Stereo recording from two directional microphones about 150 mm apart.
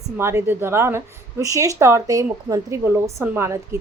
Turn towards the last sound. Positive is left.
turn(degrees=-15)  # may be behind; listen again after turning